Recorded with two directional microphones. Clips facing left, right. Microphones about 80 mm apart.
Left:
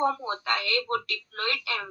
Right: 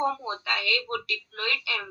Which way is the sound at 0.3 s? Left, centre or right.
Left.